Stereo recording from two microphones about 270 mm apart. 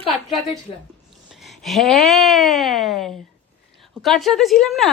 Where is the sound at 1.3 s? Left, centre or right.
Centre.